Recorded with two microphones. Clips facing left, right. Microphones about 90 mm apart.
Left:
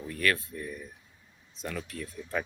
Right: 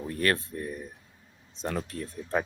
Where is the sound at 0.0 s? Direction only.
35° right (ahead or behind).